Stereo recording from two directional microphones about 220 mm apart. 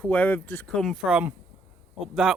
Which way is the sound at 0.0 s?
5° left (ahead or behind).